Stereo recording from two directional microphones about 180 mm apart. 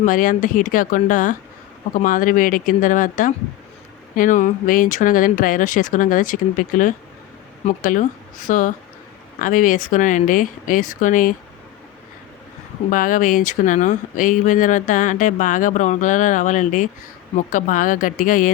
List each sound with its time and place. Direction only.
0.0 s speech: 50° left (ahead or behind)
12.9 s speech: 45° left (ahead or behind)